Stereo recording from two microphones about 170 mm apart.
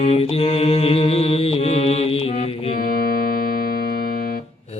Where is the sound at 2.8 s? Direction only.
55° left (ahead or behind).